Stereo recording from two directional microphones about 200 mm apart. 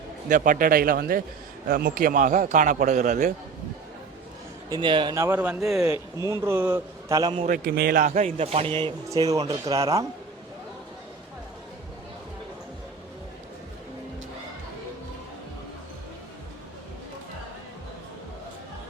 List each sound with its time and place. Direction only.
0.3 s a man's voice: 40° right (ahead or behind)
4.7 s a man's voice: 25° right (ahead or behind)
7.4 s a man's voice: 45° right (ahead or behind); by 10.1 s 15° right (ahead or behind)